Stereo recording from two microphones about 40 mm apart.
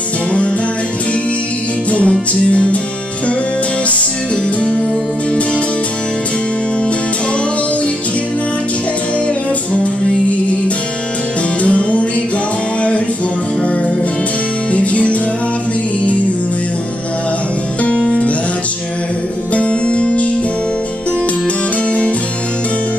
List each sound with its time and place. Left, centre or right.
1.9 s music: left
11.6 s music: left
14.7 s music: left
17.8 s music: left
19.5 s music: left